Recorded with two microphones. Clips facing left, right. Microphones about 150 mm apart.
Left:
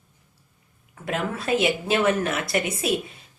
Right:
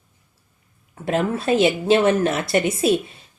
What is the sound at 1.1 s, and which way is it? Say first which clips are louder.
A woman's voice: right 5 dB; 30° right (ahead or behind).